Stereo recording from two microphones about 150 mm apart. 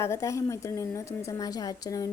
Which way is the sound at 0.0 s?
20° left (ahead or behind).